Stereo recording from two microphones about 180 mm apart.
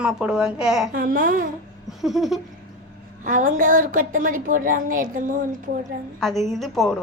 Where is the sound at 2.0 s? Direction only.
Centre (ahead or behind).